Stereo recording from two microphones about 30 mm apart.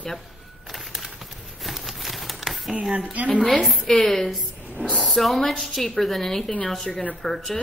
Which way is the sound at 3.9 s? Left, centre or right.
Centre.